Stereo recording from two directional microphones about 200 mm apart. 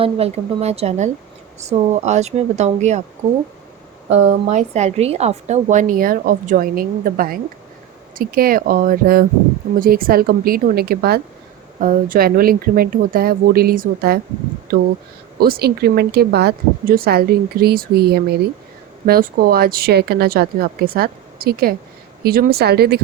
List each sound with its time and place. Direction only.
0.0 s a woman's voice: 30° right (ahead or behind)
4.4 s a woman's voice: 35° right (ahead or behind)
15.4 s speech: 50° right (ahead or behind)